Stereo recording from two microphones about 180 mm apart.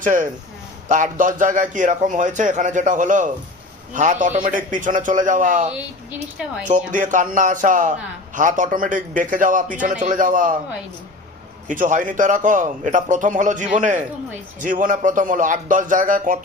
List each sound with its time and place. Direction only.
0.0 s a man's voice: 45° right (ahead or behind)
6.7 s a man's voice: 45° right (ahead or behind)
11.7 s a man's voice: 45° right (ahead or behind)